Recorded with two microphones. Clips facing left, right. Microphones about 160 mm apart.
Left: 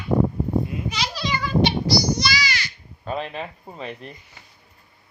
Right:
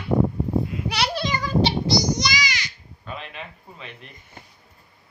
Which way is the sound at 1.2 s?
40° right (ahead or behind).